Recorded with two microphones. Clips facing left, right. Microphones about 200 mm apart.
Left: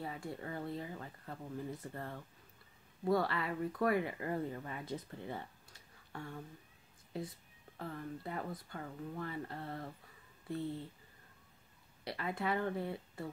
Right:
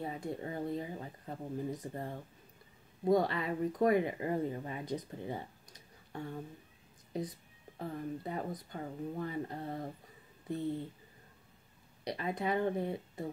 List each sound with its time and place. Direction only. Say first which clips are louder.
0.0 s speech: right 4 dB; 20° right (ahead or behind)
12.0 s speech: right 3 dB; 20° right (ahead or behind)